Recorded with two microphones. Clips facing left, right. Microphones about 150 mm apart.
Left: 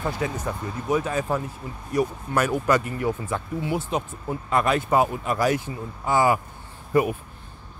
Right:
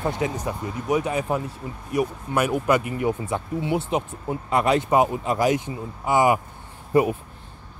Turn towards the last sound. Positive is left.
turn(degrees=-25)  # may be behind; listen again after turning